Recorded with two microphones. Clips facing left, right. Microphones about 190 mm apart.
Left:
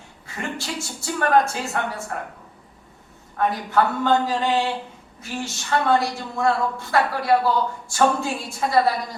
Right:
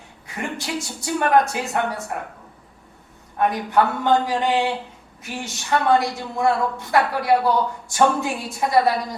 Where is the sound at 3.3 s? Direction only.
20° right (ahead or behind).